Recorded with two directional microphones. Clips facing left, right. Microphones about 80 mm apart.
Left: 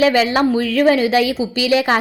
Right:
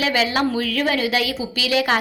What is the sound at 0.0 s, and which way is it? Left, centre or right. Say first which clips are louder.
A woman's voice: left 6 dB; left.